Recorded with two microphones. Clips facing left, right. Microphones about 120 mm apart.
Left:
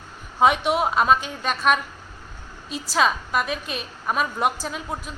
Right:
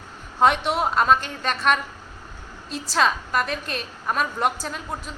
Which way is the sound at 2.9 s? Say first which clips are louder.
Even; 5° left (ahead or behind).